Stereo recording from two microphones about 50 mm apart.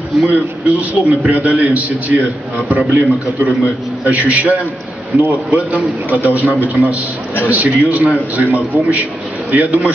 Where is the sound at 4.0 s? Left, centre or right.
Right.